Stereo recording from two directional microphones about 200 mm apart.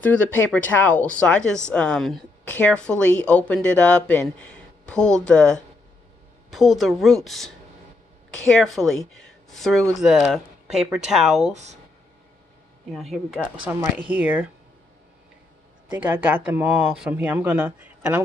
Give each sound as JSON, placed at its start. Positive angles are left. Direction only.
{"t": 0.0, "sound": "speech", "side_deg": 10}
{"t": 8.5, "sound": "speech", "side_deg": 0}
{"t": 11.5, "sound": "speech", "side_deg": -35}
{"t": 12.9, "sound": "speech", "side_deg": 0}
{"t": 15.9, "sound": "speech", "side_deg": -10}